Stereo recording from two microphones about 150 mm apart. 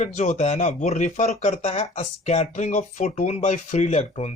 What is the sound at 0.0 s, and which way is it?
Speech, 55° left (ahead or behind).